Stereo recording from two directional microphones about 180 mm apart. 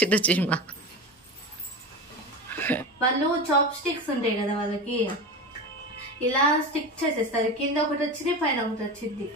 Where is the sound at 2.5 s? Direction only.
10° left (ahead or behind).